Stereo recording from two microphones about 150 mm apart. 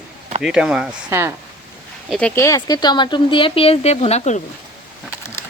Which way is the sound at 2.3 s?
20° left (ahead or behind).